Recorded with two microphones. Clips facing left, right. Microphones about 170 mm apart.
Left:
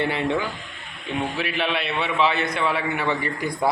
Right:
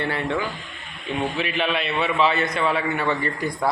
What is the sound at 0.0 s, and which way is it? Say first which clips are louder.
A man's voice: left 2 dB; 20° left (ahead or behind).